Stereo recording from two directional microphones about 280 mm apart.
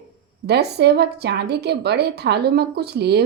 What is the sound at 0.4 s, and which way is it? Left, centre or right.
A woman's voice, right.